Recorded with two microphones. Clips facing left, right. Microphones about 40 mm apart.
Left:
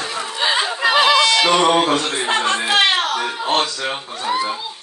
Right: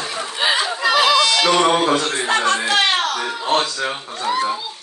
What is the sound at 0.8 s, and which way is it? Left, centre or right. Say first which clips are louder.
Chatter: left 2 dB; centre.